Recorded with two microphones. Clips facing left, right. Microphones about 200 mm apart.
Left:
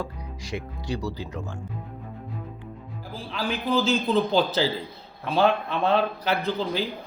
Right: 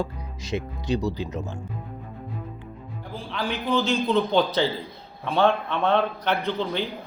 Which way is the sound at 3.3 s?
5° left (ahead or behind).